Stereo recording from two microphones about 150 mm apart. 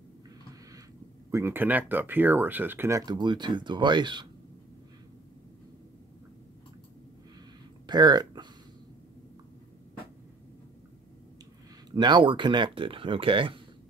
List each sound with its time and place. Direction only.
1.3 s speech: 15° right (ahead or behind); by 4.3 s 30° right (ahead or behind)
7.8 s speech: 30° right (ahead or behind)
11.9 s speech: 30° right (ahead or behind)